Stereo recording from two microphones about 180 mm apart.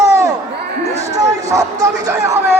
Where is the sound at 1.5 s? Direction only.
15° right (ahead or behind).